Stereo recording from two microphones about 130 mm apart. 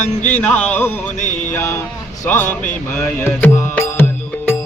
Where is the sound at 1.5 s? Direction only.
20° left (ahead or behind).